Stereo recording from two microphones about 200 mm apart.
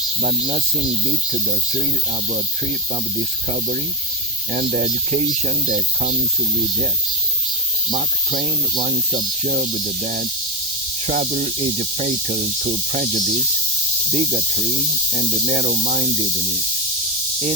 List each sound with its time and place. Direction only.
0.2 s speech: 35° right (ahead or behind)
3.2 s speech: 35° right (ahead or behind)
7.9 s speech: 35° right (ahead or behind)